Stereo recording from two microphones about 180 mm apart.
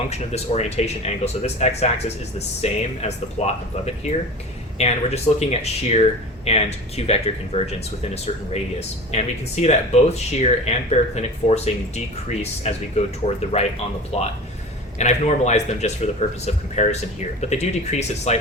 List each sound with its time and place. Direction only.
0.1 s speech: 35° left (ahead or behind)